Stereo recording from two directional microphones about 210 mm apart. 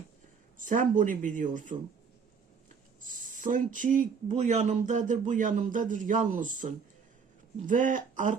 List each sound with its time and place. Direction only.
0.6 s speech: 35° right (ahead or behind)
3.0 s speech: 40° right (ahead or behind)